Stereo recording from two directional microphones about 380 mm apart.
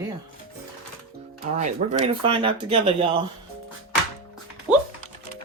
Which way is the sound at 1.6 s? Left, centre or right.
Centre.